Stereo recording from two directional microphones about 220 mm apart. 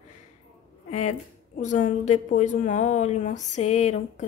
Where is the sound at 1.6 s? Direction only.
35° left (ahead or behind).